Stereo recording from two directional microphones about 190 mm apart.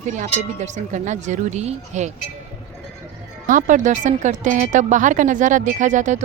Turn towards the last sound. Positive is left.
turn(degrees=-40)  # may be behind; listen again after turning